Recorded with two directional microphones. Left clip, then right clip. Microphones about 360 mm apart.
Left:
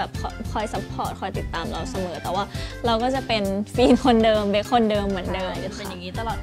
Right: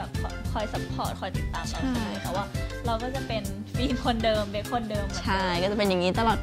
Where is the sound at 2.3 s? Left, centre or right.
Left.